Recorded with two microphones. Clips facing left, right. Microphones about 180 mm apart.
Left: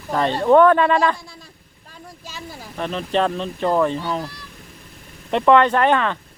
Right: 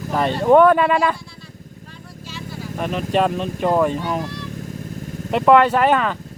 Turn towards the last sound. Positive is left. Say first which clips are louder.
# right 1 dB
turn(degrees=-5)  # may be behind; listen again after turning